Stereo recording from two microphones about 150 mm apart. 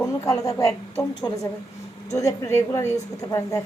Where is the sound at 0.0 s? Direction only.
20° left (ahead or behind).